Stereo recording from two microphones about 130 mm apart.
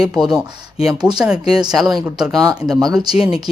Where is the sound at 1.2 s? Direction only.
5° right (ahead or behind).